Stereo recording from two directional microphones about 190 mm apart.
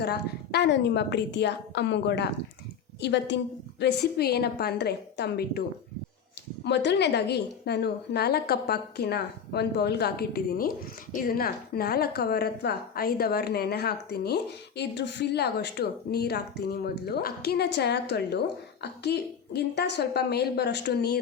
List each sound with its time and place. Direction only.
0.0 s a woman's voice: 60° left (ahead or behind)
6.7 s a woman's voice: 65° left (ahead or behind)